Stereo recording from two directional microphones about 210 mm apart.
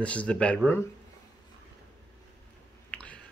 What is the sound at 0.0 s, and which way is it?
Speech, 5° left (ahead or behind).